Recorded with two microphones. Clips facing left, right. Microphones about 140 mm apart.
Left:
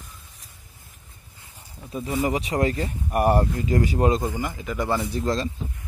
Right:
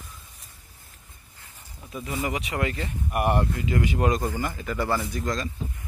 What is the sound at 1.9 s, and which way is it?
Speech, 30° left (ahead or behind).